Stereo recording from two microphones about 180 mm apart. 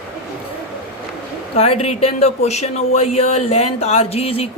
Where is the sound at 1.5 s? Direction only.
35° left (ahead or behind).